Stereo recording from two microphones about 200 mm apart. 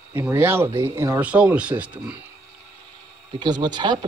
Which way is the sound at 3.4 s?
20° right (ahead or behind).